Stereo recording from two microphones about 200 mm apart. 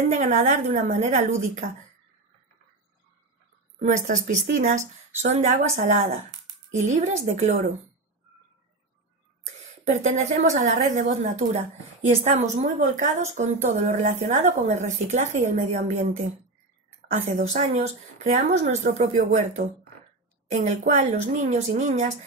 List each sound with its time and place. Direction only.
0.1 s a woman's voice: 35° right (ahead or behind)
3.8 s a woman's voice: 40° right (ahead or behind)
9.8 s a woman's voice: 35° right (ahead or behind)
17.4 s a woman's voice: 35° right (ahead or behind)